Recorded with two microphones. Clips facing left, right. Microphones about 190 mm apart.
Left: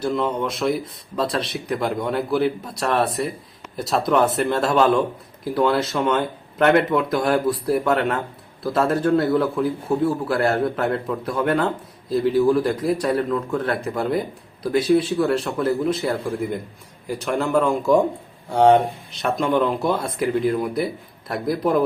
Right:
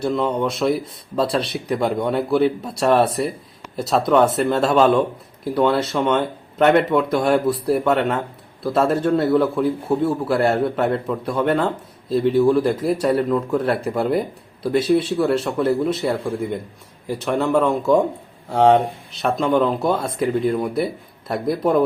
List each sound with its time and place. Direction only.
0.0 s speech: centre (ahead or behind)
20.0 s speech: 25° right (ahead or behind)
20.2 s speech: centre (ahead or behind)